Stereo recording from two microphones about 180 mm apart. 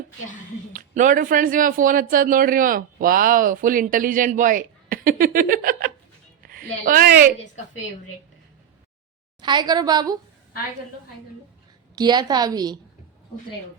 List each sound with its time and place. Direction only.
0.7 s a woman's voice: 45° right (ahead or behind)
9.4 s a woman's voice: 25° right (ahead or behind)
11.9 s a woman's voice: 25° right (ahead or behind)